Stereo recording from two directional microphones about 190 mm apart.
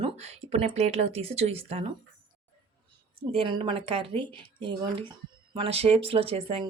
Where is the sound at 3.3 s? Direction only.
30° right (ahead or behind).